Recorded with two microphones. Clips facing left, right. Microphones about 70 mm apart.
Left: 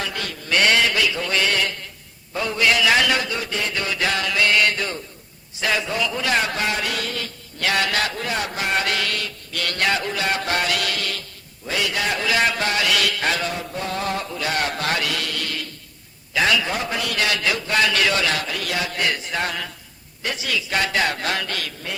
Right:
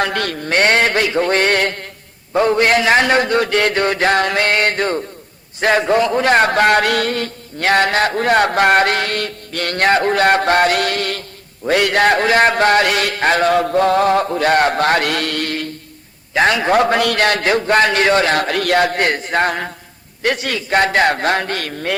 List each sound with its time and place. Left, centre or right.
0.0 s a man's voice: right
13.5 s a man's voice: right
20.2 s a man's voice: right